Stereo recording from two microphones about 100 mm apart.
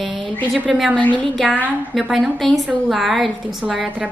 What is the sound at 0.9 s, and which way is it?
Speech, 10° left (ahead or behind).